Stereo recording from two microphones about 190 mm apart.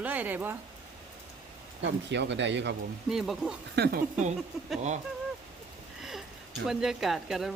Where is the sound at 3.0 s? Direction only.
Centre (ahead or behind).